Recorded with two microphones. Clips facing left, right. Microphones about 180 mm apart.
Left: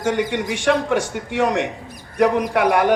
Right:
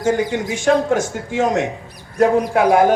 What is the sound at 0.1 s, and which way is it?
Speech, 70° left (ahead or behind).